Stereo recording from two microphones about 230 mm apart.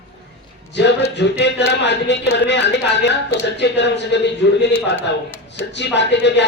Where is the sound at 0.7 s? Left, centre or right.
Left.